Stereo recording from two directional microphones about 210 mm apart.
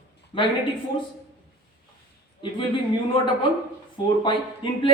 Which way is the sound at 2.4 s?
25° left (ahead or behind).